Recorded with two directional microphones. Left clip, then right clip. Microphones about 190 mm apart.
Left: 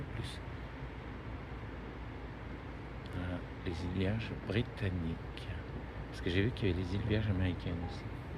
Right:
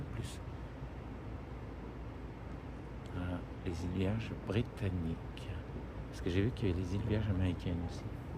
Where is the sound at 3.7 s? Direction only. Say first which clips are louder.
Left 1 dB; 5° right (ahead or behind).